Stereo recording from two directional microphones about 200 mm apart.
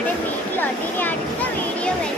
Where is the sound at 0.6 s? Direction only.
10° left (ahead or behind).